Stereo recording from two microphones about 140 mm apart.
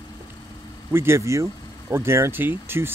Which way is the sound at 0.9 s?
20° right (ahead or behind).